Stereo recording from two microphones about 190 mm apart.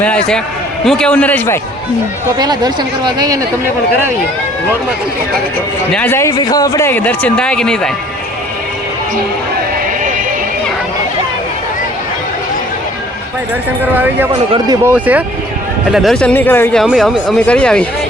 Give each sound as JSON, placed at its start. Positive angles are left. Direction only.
{"t": 0.0, "sound": "speech", "side_deg": 5}
{"t": 2.4, "sound": "speech", "side_deg": -20}
{"t": 5.9, "sound": "speech", "side_deg": 10}
{"t": 13.9, "sound": "speech", "side_deg": -10}